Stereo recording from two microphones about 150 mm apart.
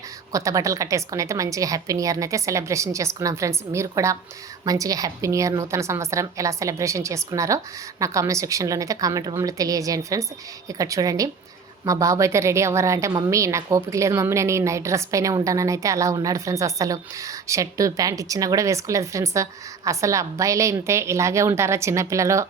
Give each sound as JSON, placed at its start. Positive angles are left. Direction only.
{"t": 0.3, "sound": "a woman's voice", "side_deg": -20}